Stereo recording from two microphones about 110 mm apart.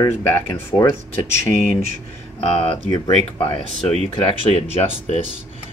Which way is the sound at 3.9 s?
65° left (ahead or behind).